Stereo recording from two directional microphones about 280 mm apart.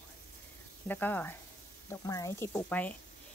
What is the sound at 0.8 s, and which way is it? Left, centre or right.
Speech, centre.